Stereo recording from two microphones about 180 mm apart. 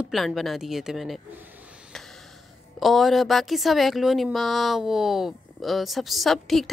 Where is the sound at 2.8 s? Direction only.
Centre (ahead or behind).